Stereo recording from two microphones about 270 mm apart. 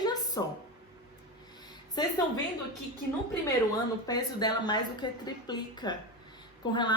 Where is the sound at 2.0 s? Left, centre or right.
Centre.